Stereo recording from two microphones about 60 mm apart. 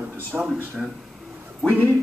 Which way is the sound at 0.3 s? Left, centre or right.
Centre.